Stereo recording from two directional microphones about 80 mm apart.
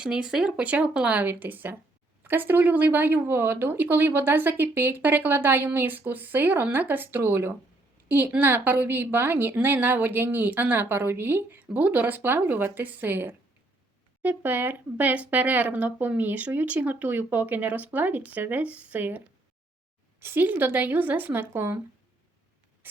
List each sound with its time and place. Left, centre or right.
0.0 s speech: centre; by 21.8 s right